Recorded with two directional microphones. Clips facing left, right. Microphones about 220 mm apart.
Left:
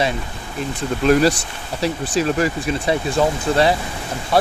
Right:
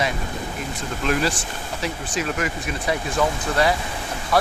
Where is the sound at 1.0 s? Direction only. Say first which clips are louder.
Left 8 dB; 40° left (ahead or behind).